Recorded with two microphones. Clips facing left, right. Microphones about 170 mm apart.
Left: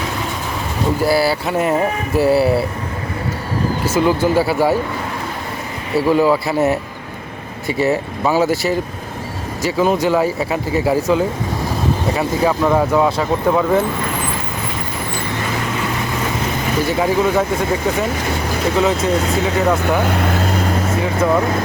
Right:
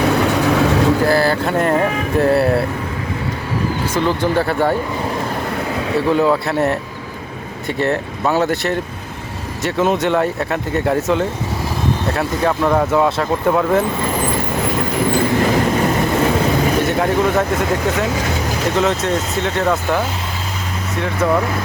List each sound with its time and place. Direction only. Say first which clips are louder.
0.3 s vehicle: right 10 dB; 75° right (ahead or behind)
1.0 s speech: right 1 dB; 10° left (ahead or behind)
3.8 s speech: left 4 dB; 5° left (ahead or behind)
6.1 s speech: left 1 dB; 5° left (ahead or behind)
16.8 s speech: even; centre (ahead or behind)
18.8 s speech: left 2 dB; centre (ahead or behind)
20.1 s speech: left 8 dB; 60° left (ahead or behind)